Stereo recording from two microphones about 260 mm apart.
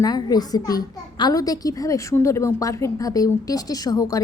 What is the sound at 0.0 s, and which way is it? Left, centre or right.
A child's voice, centre.